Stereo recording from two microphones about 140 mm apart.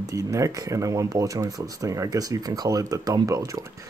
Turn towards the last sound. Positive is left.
turn(degrees=-25)  # may be behind; listen again after turning